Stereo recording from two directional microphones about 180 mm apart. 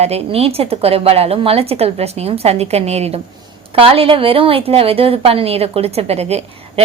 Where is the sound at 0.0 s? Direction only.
35° right (ahead or behind).